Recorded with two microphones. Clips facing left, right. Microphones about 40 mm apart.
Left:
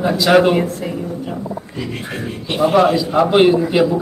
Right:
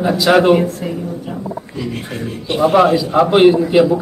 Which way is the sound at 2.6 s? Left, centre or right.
Centre.